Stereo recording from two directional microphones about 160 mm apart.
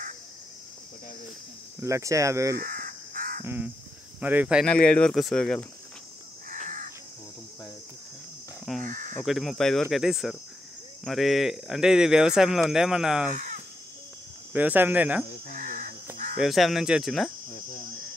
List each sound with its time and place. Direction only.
1.8 s speech: 20° right (ahead or behind)
2.5 s crow: 60° right (ahead or behind)
3.4 s speech: 10° right (ahead or behind)
4.6 s speech: 5° left (ahead or behind)
6.5 s crow: 55° right (ahead or behind)
8.8 s speech: 55° right (ahead or behind)
9.2 s speech: centre (ahead or behind)
14.5 s speech: 10° right (ahead or behind)
15.5 s caw: 55° right (ahead or behind)
16.3 s speech: centre (ahead or behind)